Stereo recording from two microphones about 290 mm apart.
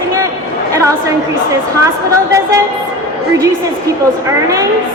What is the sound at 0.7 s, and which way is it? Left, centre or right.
Speech, centre.